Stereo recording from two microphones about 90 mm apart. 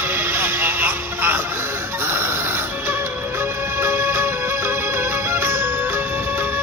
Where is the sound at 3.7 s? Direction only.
30° right (ahead or behind).